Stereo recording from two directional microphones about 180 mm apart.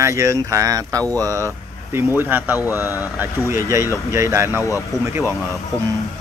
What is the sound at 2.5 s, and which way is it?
Speech, 15° left (ahead or behind).